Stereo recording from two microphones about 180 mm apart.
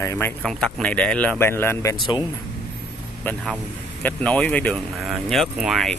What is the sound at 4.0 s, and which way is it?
Speech, 5° left (ahead or behind).